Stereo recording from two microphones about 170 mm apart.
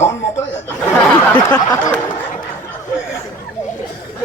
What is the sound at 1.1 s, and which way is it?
Speech, 5° left (ahead or behind).